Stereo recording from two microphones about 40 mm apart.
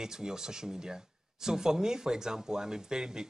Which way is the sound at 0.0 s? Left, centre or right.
Centre.